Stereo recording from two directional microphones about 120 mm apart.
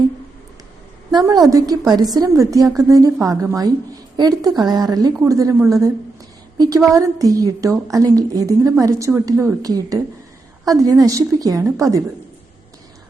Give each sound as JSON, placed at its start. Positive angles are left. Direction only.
{"t": 1.1, "sound": "a woman's voice", "side_deg": -30}